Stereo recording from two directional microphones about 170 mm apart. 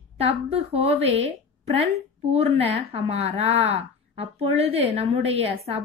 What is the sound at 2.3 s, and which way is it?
A woman's voice, 35° right (ahead or behind).